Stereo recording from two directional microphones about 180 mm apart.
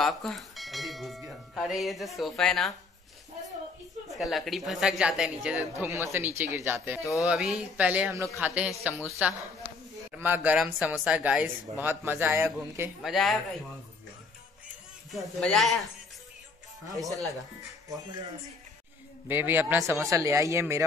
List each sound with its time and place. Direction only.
0.0 s a woman's voice: centre (ahead or behind)
4.1 s a woman's voice: centre (ahead or behind)
15.0 s a woman's voice: centre (ahead or behind)
19.2 s a man's voice: 10° right (ahead or behind)
20.0 s a man's voice: 15° right (ahead or behind)